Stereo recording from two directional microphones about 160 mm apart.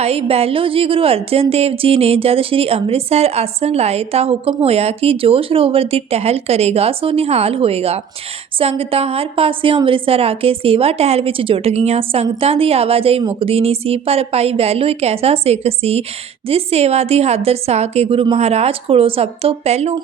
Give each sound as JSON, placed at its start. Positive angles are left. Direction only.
{"t": 0.0, "sound": "a woman's voice", "side_deg": -40}